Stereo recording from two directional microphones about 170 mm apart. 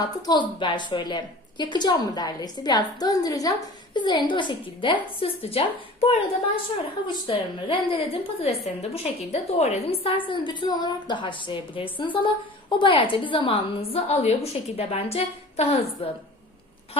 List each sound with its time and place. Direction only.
0.0 s a woman's voice: 25° left (ahead or behind)